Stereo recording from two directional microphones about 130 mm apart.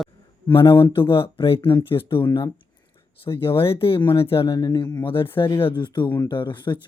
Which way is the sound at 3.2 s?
40° left (ahead or behind).